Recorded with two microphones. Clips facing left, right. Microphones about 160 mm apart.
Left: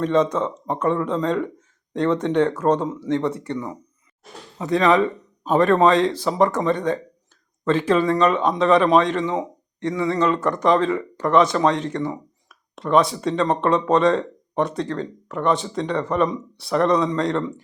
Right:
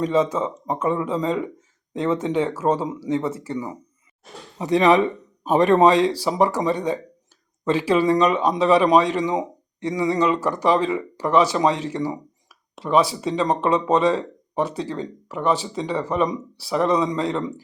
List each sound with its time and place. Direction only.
0.0 s speech: 5° right (ahead or behind)